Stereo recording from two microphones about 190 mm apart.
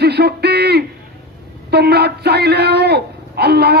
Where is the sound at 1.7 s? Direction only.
60° right (ahead or behind).